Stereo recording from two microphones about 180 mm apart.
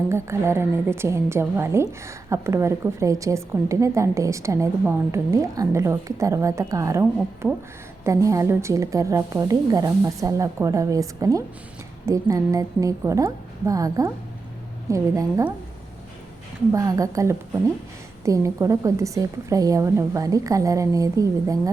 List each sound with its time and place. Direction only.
0.1 s a woman's voice: 15° right (ahead or behind)
7.4 s speech: 5° right (ahead or behind)
8.0 s a woman's voice: 15° right (ahead or behind)
16.7 s a woman's voice: 20° right (ahead or behind)